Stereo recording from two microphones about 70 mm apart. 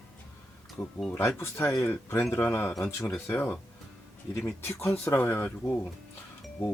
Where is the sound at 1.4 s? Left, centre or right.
Left.